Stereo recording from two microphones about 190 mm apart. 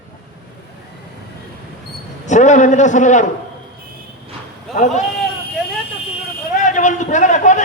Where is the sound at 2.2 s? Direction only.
40° left (ahead or behind).